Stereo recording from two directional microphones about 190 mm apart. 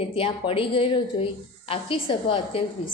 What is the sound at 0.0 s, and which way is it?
A woman's voice, 30° left (ahead or behind).